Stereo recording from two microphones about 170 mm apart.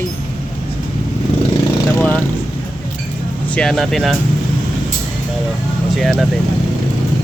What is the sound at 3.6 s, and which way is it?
Speech, centre (ahead or behind).